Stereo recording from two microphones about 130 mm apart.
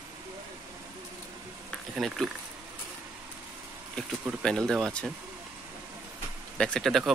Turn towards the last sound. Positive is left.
turn(degrees=0)  # may be behind; listen again after turning